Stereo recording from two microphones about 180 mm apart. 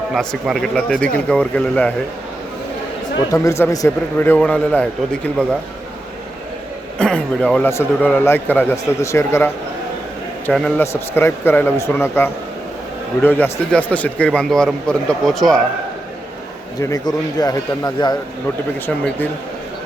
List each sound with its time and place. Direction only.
0.1 s a man's voice: centre (ahead or behind)
3.4 s a man's voice: 15° left (ahead or behind)
7.0 s a man's voice: 5° left (ahead or behind)
16.8 s a man's voice: 20° left (ahead or behind)